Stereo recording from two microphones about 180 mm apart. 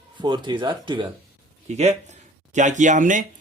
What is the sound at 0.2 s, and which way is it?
Speech, 25° right (ahead or behind).